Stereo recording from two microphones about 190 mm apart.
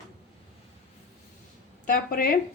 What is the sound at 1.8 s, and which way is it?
Speech, 50° left (ahead or behind).